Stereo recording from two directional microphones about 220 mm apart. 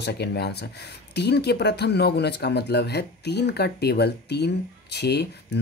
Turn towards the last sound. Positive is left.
turn(degrees=50)  # may be behind; listen again after turning